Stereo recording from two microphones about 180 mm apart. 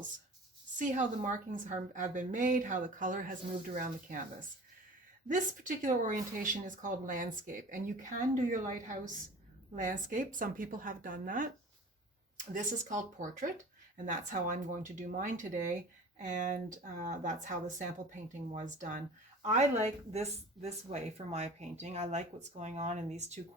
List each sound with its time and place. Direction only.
0.8 s speech: 45° right (ahead or behind)
12.5 s speech: 45° right (ahead or behind)